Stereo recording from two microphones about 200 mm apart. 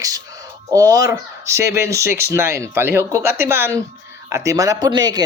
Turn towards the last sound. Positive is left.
turn(degrees=-20)  # may be behind; listen again after turning